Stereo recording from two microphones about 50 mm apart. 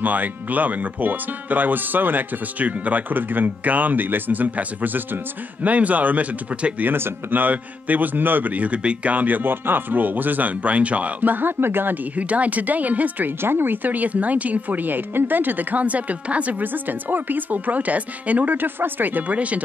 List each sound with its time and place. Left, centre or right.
0.0 s speech: right
6.9 s speech: right
7.3 s speech: right
13.4 s speech: right